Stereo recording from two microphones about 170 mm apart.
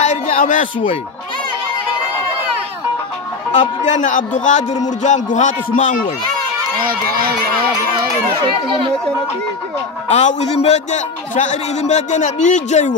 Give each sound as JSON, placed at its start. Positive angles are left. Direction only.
{"t": 0.0, "sound": "music", "side_deg": 45}
{"t": 3.5, "sound": "a man's voice", "side_deg": 45}
{"t": 6.8, "sound": "speech", "side_deg": -60}
{"t": 8.6, "sound": "speech", "side_deg": -30}
{"t": 10.0, "sound": "a man's voice", "side_deg": 40}